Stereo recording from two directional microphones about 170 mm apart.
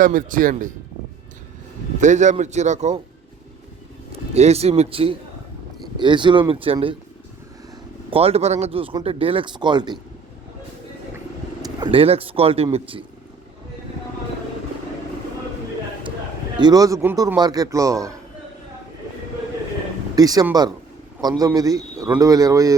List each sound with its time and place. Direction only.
0.0 s speech: 50° right (ahead or behind)
2.0 s speech: 45° right (ahead or behind)
4.1 s a man's voice: 40° right (ahead or behind)
8.1 s speech: 35° right (ahead or behind)
11.8 s speech: 30° right (ahead or behind)
16.6 s a man's voice: 25° right (ahead or behind)
17.3 s a man's voice: 25° right (ahead or behind)
20.1 s a man's voice: 20° right (ahead or behind)